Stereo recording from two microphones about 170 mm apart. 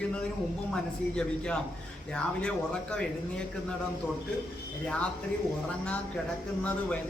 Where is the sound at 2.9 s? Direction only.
5° left (ahead or behind).